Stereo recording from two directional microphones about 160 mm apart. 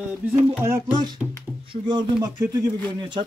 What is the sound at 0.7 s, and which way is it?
A man's voice, 15° right (ahead or behind).